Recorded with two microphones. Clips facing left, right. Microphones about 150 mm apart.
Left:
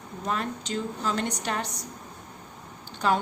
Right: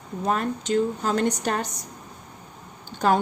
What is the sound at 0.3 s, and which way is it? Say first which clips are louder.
A woman's voice: right 6 dB; 50° right (ahead or behind).